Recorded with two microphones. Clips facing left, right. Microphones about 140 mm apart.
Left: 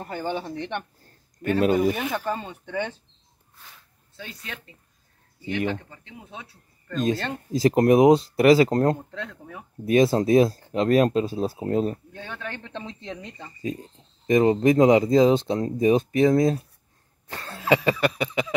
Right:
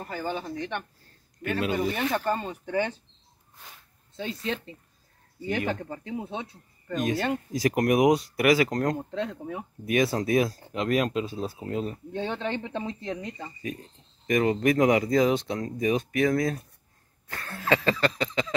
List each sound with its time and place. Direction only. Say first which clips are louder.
0.1 s speech: left 3 dB; 30° left (ahead or behind)
1.4 s speech: left 7 dB; 45° left (ahead or behind)
1.8 s speech: left 3 dB; 5° left (ahead or behind)
4.2 s speech: right 8 dB; 25° right (ahead or behind)
5.7 s speech: right 1 dB; 45° right (ahead or behind); by 7.1 s 20° right (ahead or behind)
7.5 s speech: left 7 dB; 30° left (ahead or behind)
9.1 s speech: right 5 dB; 20° right (ahead or behind)
9.8 s speech: left 6 dB; 30° left (ahead or behind)
12.1 s speech: right 6 dB; 25° right (ahead or behind); by 13.5 s centre (ahead or behind)
13.6 s speech: left 5 dB; 25° left (ahead or behind)
17.3 s a sound: left 4 dB; 20° left (ahead or behind)